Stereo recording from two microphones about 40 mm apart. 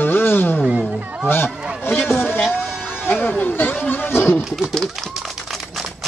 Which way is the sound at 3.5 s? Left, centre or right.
Left.